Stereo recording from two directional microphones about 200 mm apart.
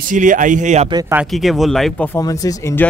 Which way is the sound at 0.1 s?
40° right (ahead or behind).